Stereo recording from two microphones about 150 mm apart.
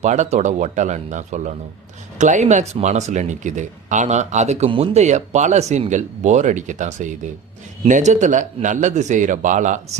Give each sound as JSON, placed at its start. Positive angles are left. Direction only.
{"t": 0.0, "sound": "speech", "side_deg": -50}